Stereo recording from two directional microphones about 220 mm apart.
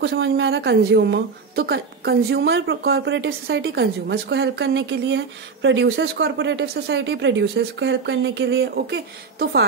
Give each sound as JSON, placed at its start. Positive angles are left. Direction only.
{"t": 0.0, "sound": "a woman's voice", "side_deg": -55}